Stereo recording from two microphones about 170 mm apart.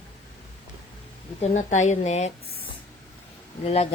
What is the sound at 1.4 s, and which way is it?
Speech, 45° left (ahead or behind).